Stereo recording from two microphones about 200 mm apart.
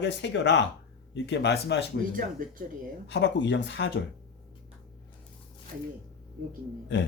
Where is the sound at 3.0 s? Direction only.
65° left (ahead or behind).